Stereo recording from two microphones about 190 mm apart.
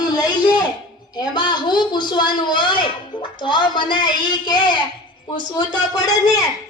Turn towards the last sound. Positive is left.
turn(degrees=20)  # may be behind; listen again after turning